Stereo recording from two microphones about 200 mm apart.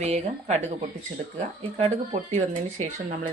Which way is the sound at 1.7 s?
30° right (ahead or behind).